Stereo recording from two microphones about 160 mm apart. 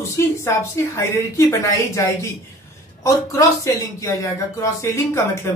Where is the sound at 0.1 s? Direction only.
15° left (ahead or behind).